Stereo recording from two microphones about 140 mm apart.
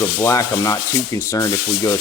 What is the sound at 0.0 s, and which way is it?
Sanding, 20° left (ahead or behind).